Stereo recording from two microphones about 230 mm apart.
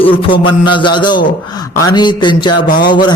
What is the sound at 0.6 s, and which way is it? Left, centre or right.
A man's voice, left.